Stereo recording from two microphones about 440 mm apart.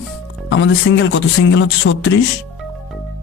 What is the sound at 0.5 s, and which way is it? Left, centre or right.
Speech, left.